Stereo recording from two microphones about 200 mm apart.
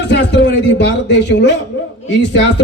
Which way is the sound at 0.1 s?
60° left (ahead or behind).